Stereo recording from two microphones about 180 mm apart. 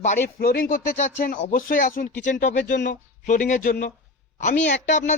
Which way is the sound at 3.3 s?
45° left (ahead or behind).